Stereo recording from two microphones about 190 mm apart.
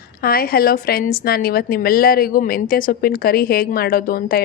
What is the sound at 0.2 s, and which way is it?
A woman's voice, 50° left (ahead or behind).